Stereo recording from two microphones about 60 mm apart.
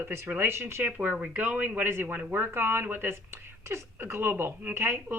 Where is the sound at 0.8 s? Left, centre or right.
Right.